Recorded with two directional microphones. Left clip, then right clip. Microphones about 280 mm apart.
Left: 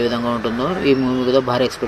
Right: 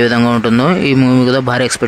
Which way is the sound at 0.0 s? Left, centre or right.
Right.